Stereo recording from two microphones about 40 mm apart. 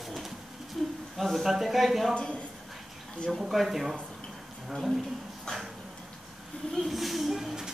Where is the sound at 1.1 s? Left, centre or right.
Centre.